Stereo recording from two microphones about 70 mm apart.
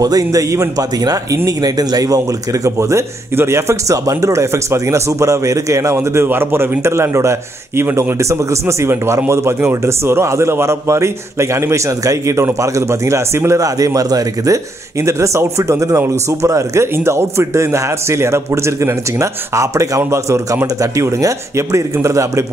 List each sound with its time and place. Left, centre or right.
0.0 s speech: right
6.2 s a man's voice: right